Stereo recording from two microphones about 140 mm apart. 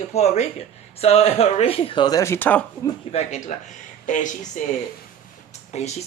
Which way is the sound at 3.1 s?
55° left (ahead or behind).